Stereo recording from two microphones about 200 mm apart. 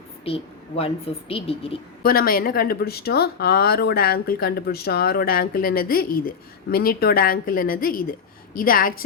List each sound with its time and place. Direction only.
0.3 s a woman's voice: 30° left (ahead or behind)
2.0 s speech: 45° left (ahead or behind)